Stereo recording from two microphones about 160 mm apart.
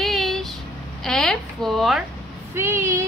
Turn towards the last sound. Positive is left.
turn(degrees=-20)  # may be behind; listen again after turning